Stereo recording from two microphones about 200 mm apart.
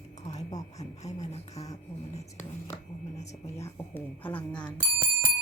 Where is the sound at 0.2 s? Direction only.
35° left (ahead or behind).